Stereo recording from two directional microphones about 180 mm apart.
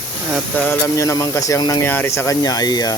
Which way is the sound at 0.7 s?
15° left (ahead or behind).